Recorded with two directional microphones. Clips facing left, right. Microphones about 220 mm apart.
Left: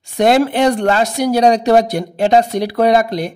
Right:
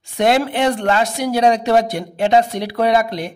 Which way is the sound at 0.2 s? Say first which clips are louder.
Left 4 dB; 40° left (ahead or behind).